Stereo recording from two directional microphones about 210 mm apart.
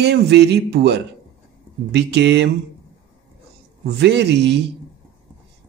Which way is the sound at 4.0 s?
55° right (ahead or behind).